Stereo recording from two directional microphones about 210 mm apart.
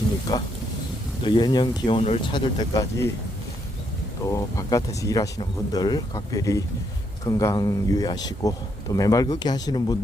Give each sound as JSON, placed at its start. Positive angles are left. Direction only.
{"t": 0.3, "sound": "speech", "side_deg": 20}
{"t": 4.3, "sound": "speech", "side_deg": 15}